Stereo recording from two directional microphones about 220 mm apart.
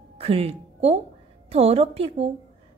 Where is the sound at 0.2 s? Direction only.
25° right (ahead or behind).